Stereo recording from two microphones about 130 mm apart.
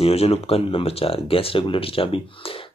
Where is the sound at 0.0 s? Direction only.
50° left (ahead or behind).